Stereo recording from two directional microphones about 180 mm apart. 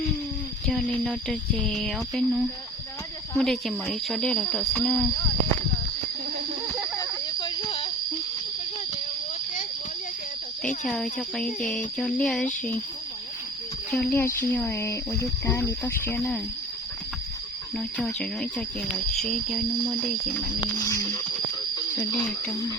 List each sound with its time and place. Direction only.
0.7 s speech: 5° left (ahead or behind)
7.3 s cricket: 25° left (ahead or behind)
10.8 s speech: centre (ahead or behind)
13.9 s speech: 10° left (ahead or behind)
17.7 s speech: 5° left (ahead or behind)
20.7 s music: 15° left (ahead or behind)